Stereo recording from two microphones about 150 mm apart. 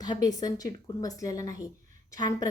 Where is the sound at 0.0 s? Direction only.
25° left (ahead or behind).